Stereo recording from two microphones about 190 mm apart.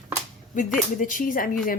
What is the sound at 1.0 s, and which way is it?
Speech, 45° left (ahead or behind).